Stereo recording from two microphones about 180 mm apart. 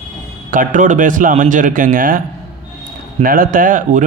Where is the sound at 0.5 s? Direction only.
45° right (ahead or behind).